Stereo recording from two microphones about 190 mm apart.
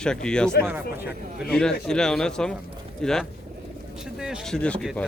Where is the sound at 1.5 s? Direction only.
5° left (ahead or behind).